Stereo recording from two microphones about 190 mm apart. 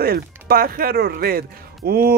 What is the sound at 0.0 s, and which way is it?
Speech, 55° right (ahead or behind).